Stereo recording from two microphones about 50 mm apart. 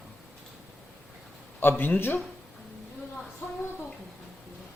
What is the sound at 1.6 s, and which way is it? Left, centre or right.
Speech, left.